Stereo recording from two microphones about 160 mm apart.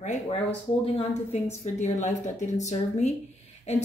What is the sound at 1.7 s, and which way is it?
A woman's voice, 45° left (ahead or behind).